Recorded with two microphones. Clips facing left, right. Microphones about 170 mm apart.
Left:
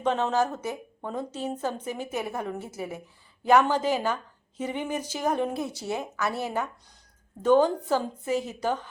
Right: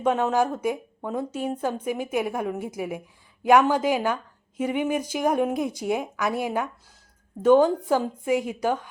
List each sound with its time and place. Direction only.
0.0 s a woman's voice: 10° right (ahead or behind)